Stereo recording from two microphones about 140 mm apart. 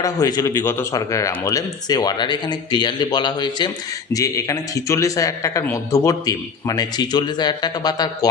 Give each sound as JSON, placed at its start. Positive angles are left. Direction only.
{"t": 0.0, "sound": "speech", "side_deg": 30}